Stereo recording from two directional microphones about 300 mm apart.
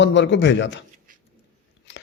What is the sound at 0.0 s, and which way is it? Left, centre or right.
Speech, left.